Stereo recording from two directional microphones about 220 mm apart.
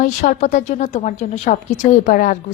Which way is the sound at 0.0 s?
35° left (ahead or behind).